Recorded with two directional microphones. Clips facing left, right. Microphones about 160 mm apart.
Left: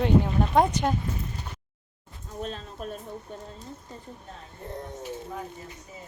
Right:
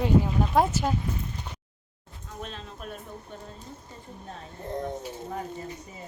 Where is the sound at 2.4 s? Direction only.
40° left (ahead or behind).